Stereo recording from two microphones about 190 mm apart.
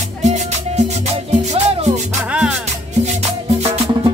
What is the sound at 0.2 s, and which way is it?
Music, 35° right (ahead or behind).